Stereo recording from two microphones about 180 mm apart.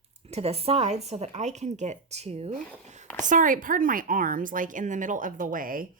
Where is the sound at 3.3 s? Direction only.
50° right (ahead or behind).